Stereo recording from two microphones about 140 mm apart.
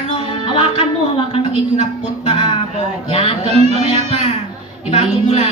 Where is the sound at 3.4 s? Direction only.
50° right (ahead or behind).